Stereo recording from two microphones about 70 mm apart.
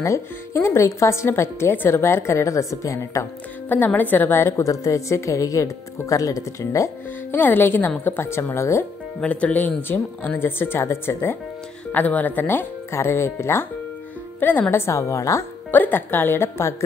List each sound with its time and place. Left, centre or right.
0.0 s speech: left
3.6 s speech: left
4.6 s speech: left
7.2 s speech: left
9.2 s speech: centre; by 11.1 s left
11.9 s speech: left
12.9 s speech: left
14.4 s speech: left
15.7 s speech: left